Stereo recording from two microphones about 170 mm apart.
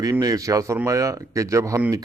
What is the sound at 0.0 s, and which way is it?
Speech, 20° right (ahead or behind).